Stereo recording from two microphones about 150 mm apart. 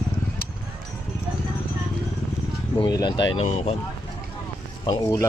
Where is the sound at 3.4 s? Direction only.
45° left (ahead or behind).